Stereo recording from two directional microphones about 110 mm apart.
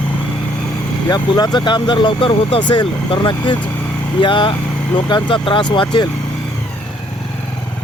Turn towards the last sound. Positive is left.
turn(degrees=45)  # may be behind; listen again after turning